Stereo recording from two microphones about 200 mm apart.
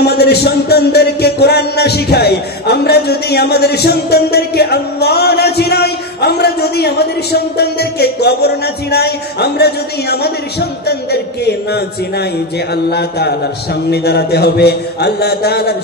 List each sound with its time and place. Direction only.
0.0 s speech: 55° left (ahead or behind)
13.8 s speech: 55° left (ahead or behind)